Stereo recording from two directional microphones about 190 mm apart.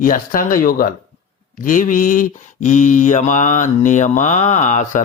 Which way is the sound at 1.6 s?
45° left (ahead or behind).